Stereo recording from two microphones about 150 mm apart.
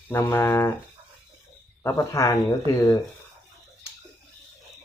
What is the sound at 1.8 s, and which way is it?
Speech, 20° left (ahead or behind).